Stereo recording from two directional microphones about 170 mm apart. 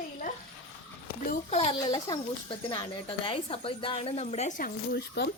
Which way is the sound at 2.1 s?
20° left (ahead or behind).